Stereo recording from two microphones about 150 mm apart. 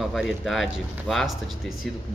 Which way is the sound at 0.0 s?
Centre (ahead or behind).